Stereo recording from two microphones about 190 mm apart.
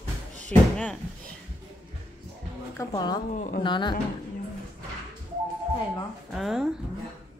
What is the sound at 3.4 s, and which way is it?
Speech, 45° left (ahead or behind).